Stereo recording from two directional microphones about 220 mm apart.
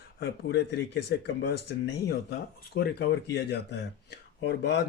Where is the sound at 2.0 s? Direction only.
45° left (ahead or behind).